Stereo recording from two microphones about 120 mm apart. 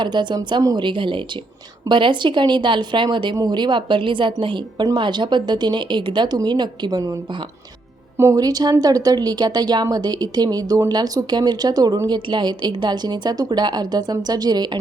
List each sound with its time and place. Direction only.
0.0 s speech: 40° right (ahead or behind)
8.2 s speech: 25° right (ahead or behind)